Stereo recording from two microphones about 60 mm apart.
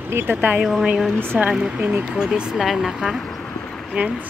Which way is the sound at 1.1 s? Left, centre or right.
Right.